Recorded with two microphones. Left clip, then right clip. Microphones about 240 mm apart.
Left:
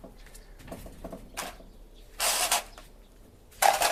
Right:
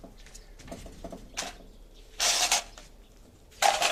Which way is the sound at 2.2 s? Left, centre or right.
Centre.